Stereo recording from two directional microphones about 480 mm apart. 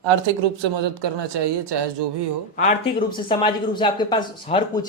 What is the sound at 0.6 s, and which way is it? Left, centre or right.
Speech, right.